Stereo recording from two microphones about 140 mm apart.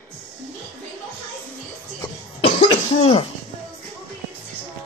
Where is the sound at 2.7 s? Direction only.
45° left (ahead or behind).